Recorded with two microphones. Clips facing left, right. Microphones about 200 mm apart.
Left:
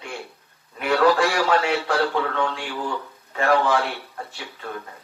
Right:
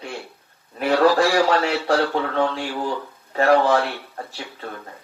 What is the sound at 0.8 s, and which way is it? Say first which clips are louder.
Speech: right 2 dB; 35° right (ahead or behind).